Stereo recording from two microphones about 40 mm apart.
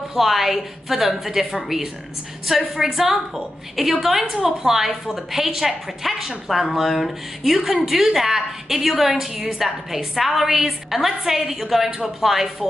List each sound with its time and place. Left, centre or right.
0.1 s a woman's voice: centre
2.4 s a woman's voice: centre